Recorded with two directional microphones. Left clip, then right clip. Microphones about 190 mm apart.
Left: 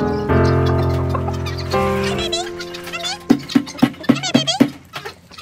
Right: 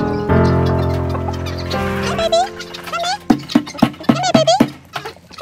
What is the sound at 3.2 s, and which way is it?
Music, 35° right (ahead or behind).